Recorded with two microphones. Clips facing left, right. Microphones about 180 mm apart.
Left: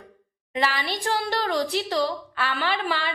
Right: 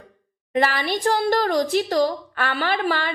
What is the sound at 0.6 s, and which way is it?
A woman's voice, 50° right (ahead or behind).